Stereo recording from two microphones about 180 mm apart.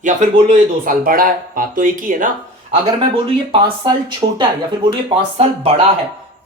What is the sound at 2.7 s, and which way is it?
A woman's voice, 30° right (ahead or behind).